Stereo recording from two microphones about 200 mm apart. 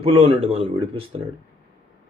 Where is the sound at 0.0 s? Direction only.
30° right (ahead or behind).